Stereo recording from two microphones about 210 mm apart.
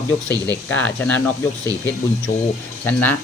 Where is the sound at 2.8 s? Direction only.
10° left (ahead or behind).